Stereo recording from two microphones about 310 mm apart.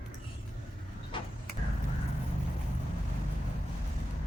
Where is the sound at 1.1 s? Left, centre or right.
Centre.